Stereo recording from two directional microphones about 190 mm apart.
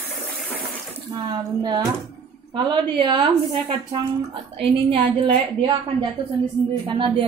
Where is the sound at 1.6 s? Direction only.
20° right (ahead or behind).